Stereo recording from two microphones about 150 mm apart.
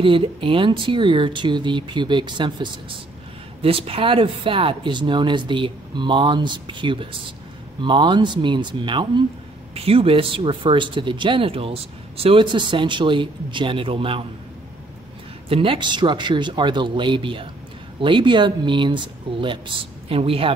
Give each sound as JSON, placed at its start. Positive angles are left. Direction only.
{"t": 0.0, "sound": "speech", "side_deg": -35}
{"t": 15.4, "sound": "speech", "side_deg": -35}